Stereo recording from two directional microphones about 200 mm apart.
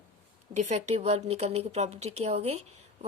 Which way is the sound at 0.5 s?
35° right (ahead or behind).